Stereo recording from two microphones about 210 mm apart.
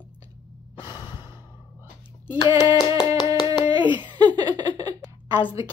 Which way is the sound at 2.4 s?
20° left (ahead or behind).